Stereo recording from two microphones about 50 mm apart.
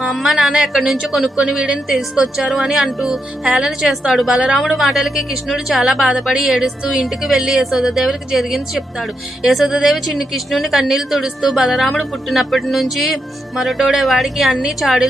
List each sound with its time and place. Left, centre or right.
0.1 s a woman's voice: centre
1.4 s a woman's voice: centre